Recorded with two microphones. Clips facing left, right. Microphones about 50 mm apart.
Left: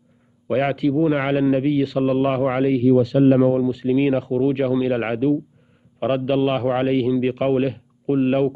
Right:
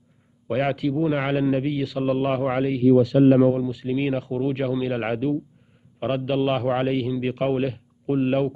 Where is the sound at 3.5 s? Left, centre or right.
Centre.